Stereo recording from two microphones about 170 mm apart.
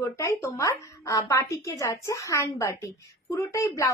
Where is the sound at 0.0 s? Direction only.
15° left (ahead or behind).